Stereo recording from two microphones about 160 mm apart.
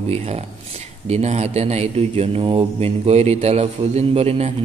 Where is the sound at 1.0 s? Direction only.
45° right (ahead or behind).